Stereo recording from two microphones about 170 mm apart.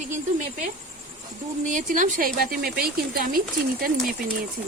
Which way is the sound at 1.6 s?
50° right (ahead or behind).